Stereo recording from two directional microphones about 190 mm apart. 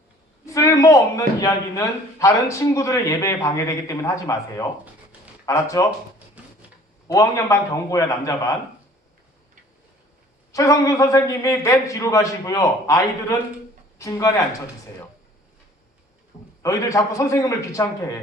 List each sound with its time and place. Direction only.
0.4 s a man's voice: 15° left (ahead or behind)
6.1 s a sound: 10° right (ahead or behind)
7.1 s a man's voice: 15° left (ahead or behind)
10.5 s a man's voice: 15° left (ahead or behind)
14.0 s a man's voice: 15° left (ahead or behind)
16.6 s a man's voice: 15° left (ahead or behind)